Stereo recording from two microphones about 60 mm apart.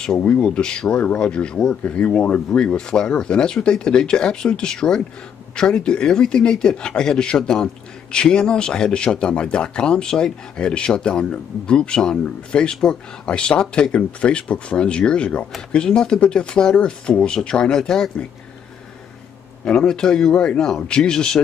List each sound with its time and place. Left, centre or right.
0.2 s speech: centre
19.6 s speech: centre